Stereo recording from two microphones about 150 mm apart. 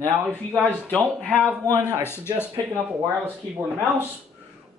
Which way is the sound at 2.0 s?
15° left (ahead or behind).